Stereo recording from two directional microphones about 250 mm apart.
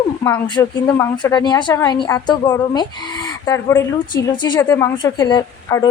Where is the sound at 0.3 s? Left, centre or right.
Centre.